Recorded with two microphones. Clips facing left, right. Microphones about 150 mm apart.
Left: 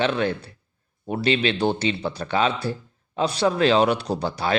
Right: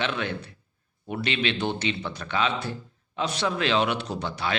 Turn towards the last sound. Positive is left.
turn(degrees=35)  # may be behind; listen again after turning